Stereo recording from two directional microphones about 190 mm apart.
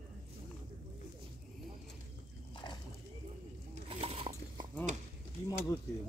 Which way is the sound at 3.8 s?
30° right (ahead or behind).